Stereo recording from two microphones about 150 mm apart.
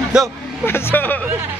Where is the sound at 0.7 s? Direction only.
15° left (ahead or behind).